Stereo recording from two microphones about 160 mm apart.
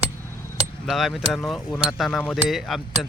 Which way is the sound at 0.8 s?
Centre (ahead or behind).